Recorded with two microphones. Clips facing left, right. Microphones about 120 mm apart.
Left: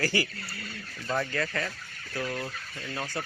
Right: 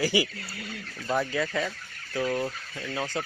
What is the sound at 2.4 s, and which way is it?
Speech, 25° right (ahead or behind).